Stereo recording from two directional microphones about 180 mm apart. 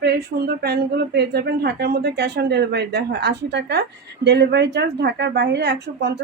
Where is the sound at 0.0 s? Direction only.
65° right (ahead or behind).